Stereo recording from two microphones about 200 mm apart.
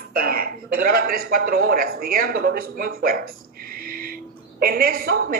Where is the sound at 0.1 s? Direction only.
50° right (ahead or behind).